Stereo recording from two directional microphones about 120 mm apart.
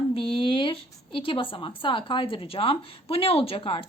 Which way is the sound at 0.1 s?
45° left (ahead or behind).